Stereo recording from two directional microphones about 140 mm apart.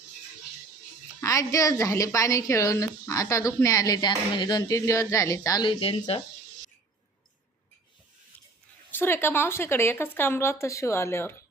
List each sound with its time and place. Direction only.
1.2 s a woman's voice: 25° left (ahead or behind)
5.8 s speech: 40° left (ahead or behind)
8.9 s speech: 15° left (ahead or behind)